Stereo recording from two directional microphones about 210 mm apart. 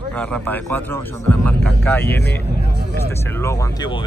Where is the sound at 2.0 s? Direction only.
50° left (ahead or behind).